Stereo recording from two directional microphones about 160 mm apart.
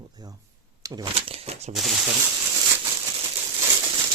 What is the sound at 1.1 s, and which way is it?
Speech, 35° right (ahead or behind).